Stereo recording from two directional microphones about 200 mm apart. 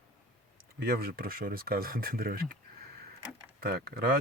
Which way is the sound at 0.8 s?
50° right (ahead or behind).